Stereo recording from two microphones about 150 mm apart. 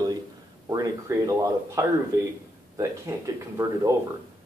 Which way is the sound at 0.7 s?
20° right (ahead or behind).